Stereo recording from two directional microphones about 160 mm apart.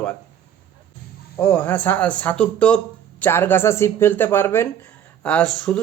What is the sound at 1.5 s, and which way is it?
A man's voice, 10° left (ahead or behind).